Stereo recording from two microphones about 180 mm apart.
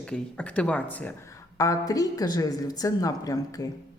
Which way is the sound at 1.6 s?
20° left (ahead or behind).